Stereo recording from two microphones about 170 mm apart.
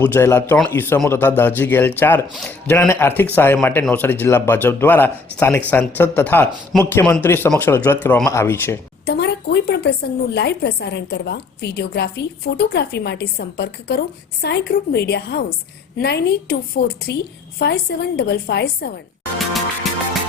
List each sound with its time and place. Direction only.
0.0 s a man's voice: 10° left (ahead or behind)
9.0 s a woman's voice: 75° left (ahead or behind)